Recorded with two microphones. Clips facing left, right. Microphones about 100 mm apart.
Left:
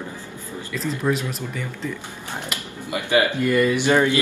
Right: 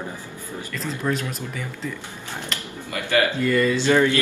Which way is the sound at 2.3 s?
15° left (ahead or behind).